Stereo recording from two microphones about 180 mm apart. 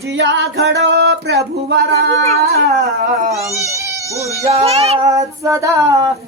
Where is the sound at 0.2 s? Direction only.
85° right; by 2.0 s 65° right (ahead or behind).